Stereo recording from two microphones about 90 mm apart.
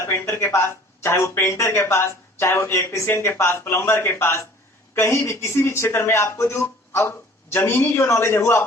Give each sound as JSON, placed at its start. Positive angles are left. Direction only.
{"t": 0.0, "sound": "speech", "side_deg": 30}